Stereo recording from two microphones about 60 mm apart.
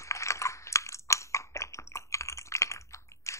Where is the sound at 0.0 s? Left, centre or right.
Left.